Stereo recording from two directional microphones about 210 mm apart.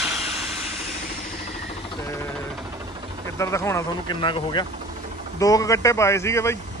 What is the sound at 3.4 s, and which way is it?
Speech, 15° left (ahead or behind).